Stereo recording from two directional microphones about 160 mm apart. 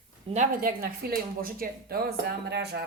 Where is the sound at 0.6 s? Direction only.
65° right (ahead or behind); by 2.8 s 90° right.